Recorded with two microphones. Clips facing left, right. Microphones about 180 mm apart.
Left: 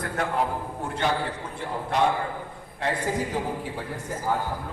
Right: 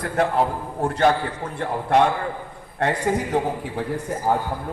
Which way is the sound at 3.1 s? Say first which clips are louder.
Right 5 dB; 60° right (ahead or behind).